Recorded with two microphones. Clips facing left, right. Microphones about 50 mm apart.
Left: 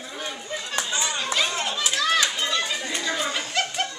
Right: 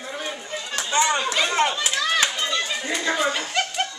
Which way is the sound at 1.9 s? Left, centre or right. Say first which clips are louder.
Even; centre.